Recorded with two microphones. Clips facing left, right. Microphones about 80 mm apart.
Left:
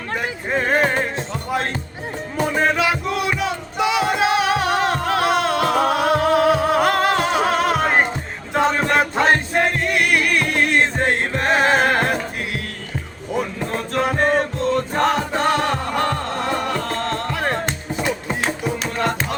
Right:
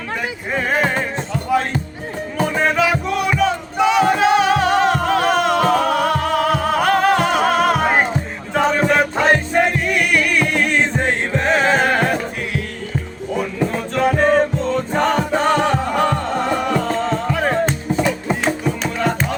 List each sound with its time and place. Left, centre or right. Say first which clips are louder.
0.8 s music: right 1 dB; centre
2.7 s music: right 3 dB; centre
14.2 s music: right 4 dB; centre